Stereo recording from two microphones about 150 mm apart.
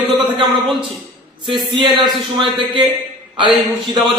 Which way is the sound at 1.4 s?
35° right (ahead or behind).